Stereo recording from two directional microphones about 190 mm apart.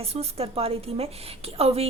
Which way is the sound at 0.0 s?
30° right (ahead or behind).